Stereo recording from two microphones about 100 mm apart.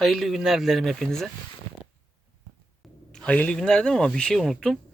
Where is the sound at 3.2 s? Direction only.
10° left (ahead or behind).